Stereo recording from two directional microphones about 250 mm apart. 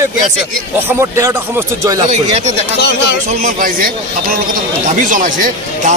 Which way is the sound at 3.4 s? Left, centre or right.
Right.